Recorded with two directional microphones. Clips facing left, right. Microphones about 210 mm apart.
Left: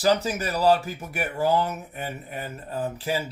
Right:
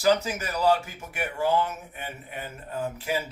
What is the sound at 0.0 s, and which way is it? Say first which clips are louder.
Speech: left 1 dB; 35° left (ahead or behind).